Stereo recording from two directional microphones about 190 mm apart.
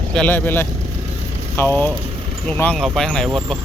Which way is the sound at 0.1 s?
5° left (ahead or behind).